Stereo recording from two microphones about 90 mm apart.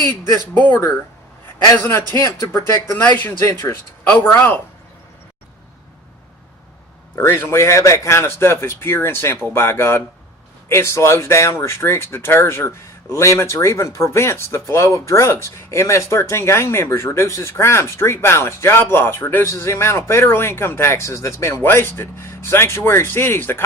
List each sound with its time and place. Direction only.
0.5 s speech: 20° left (ahead or behind)
1.8 s speech: 30° left (ahead or behind)
7.2 s speech: 25° left (ahead or behind)